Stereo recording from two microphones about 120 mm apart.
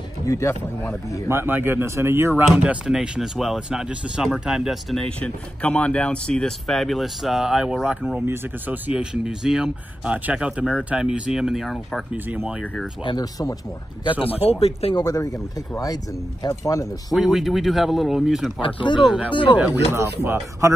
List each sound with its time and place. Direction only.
0.2 s speech: 25° left (ahead or behind)
1.3 s speech: 20° right (ahead or behind)
2.4 s speech: 5° right (ahead or behind)
12.1 s speech: 10° right (ahead or behind)
13.0 s speech: 35° left (ahead or behind)
14.2 s speech: 55° left (ahead or behind)
15.0 s speech: 30° left (ahead or behind)
17.1 s speech: centre (ahead or behind)
20.0 s speech: 20° right (ahead or behind)